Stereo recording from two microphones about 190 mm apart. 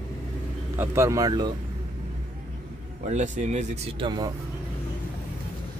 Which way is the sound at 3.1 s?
35° right (ahead or behind).